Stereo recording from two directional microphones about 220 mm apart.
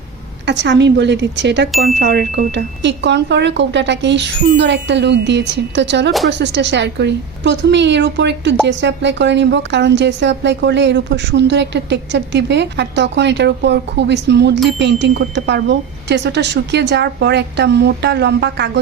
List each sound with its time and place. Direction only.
0.4 s a woman's voice: 55° right (ahead or behind)